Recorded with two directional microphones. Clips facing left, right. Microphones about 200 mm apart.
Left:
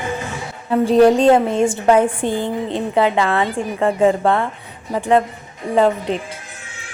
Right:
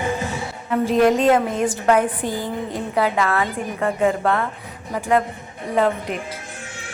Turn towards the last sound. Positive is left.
turn(degrees=30)  # may be behind; listen again after turning